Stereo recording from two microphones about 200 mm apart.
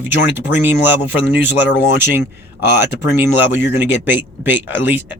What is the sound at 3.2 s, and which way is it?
Speech, 10° right (ahead or behind).